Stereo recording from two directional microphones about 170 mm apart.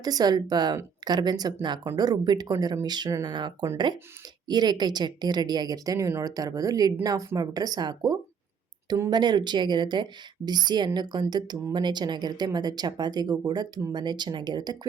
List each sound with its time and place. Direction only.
0.0 s a woman's voice: 25° right (ahead or behind)